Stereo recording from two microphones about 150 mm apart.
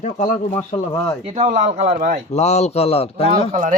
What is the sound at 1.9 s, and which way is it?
Speech, 65° right (ahead or behind).